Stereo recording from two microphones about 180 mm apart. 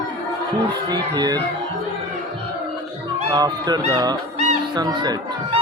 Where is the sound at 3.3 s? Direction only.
20° right (ahead or behind).